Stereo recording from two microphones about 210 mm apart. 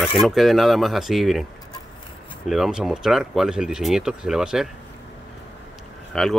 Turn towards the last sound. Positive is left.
turn(degrees=0)  # may be behind; listen again after turning